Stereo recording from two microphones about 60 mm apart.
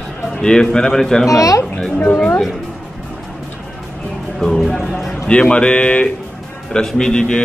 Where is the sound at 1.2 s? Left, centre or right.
Left.